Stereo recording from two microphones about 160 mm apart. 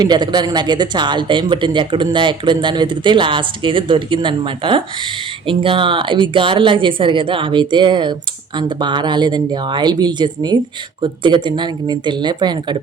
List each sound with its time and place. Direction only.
0.0 s speech: 25° right (ahead or behind)